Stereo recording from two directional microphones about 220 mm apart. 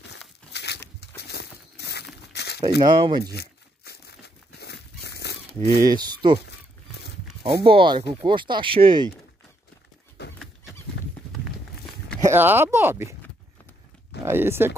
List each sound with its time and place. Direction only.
0.5 s a sound: 50° left (ahead or behind)
2.8 s speech: 20° right (ahead or behind)
3.3 s tearing: 45° left (ahead or behind)
4.6 s crumpling: 50° left (ahead or behind)
5.9 s speech: 20° right (ahead or behind)
7.4 s speech: 25° right (ahead or behind)
10.2 s dog: 50° left (ahead or behind)
12.2 s speech: 10° right (ahead or behind)
14.2 s speech: 10° right (ahead or behind)